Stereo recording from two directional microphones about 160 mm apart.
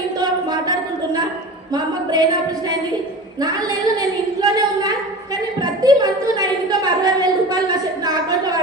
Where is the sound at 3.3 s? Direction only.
25° right (ahead or behind).